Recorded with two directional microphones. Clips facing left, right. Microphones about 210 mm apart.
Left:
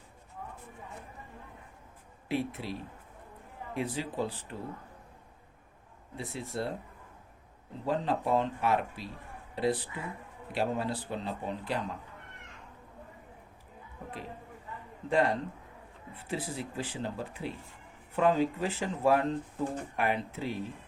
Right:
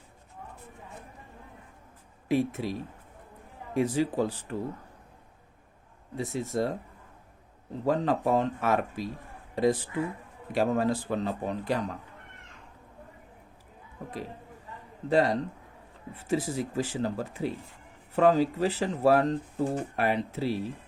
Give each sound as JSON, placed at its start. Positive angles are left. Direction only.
{"t": 2.3, "sound": "speech", "side_deg": -45}
{"t": 3.8, "sound": "speech", "side_deg": -45}
{"t": 6.1, "sound": "speech", "side_deg": -45}
{"t": 7.9, "sound": "speech", "side_deg": -45}
{"t": 15.1, "sound": "speech", "side_deg": -40}